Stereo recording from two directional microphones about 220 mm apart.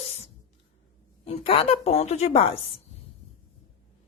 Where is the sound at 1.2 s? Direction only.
25° left (ahead or behind).